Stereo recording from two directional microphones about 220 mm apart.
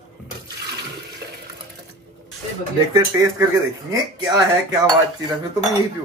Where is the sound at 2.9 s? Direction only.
15° right (ahead or behind).